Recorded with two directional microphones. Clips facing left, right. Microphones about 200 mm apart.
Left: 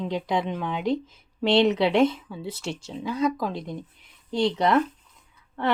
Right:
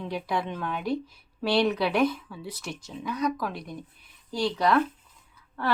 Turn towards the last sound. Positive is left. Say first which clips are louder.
# left 3 dB
turn(degrees=20)  # may be behind; listen again after turning